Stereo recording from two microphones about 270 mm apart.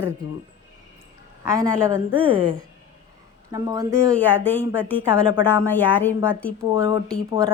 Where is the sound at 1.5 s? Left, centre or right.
Centre.